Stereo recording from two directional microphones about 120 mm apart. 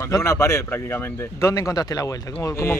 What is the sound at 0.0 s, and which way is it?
Speech, 25° left (ahead or behind).